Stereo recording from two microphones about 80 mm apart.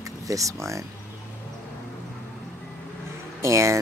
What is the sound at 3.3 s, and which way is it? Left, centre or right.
Speech, right.